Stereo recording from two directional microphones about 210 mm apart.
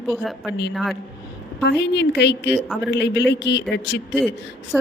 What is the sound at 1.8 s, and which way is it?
A man's voice, 55° left (ahead or behind).